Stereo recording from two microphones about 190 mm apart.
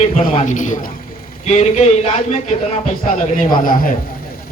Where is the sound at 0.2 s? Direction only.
40° left (ahead or behind).